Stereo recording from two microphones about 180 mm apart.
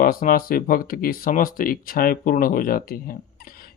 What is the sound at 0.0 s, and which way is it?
Speech, 55° left (ahead or behind).